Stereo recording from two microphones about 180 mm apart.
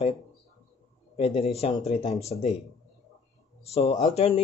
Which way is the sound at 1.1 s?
35° left (ahead or behind).